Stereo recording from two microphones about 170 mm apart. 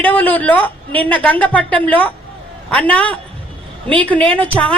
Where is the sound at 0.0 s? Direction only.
10° left (ahead or behind).